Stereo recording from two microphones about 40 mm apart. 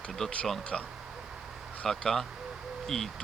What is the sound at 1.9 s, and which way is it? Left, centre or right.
Speech, centre.